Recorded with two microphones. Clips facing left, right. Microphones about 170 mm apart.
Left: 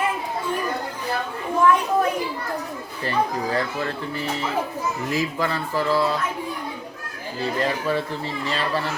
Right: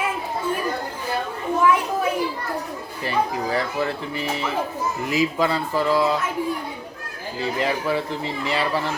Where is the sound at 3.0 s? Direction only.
15° right (ahead or behind).